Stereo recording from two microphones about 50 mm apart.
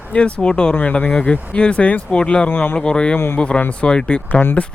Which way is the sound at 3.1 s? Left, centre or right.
Left.